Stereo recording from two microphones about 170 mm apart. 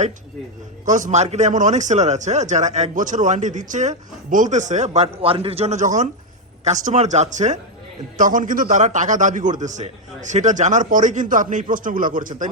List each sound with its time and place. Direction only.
0.9 s a man's voice: 45° right (ahead or behind)